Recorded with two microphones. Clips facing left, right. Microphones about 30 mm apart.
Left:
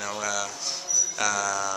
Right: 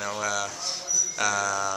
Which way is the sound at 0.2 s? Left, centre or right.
Centre.